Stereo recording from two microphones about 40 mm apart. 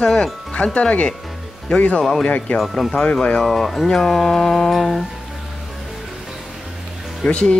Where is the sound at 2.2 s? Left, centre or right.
Left.